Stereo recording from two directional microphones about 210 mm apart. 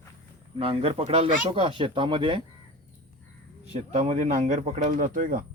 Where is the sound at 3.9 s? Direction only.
35° right (ahead or behind).